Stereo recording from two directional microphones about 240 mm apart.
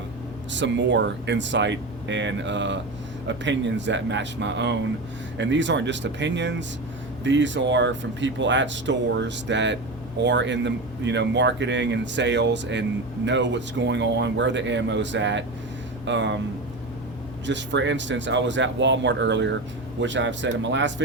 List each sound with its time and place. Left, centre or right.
0.5 s speech: right
17.4 s speech: right